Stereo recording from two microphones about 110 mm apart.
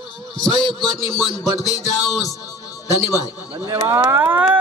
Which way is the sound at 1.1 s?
35° left (ahead or behind).